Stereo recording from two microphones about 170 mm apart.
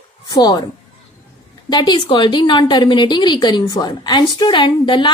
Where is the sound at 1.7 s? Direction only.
25° left (ahead or behind).